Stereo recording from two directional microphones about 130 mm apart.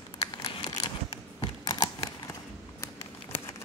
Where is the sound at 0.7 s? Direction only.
30° left (ahead or behind).